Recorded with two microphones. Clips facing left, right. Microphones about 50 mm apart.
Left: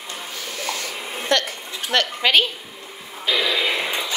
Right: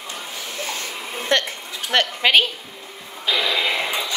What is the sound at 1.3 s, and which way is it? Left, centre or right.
Speech, right.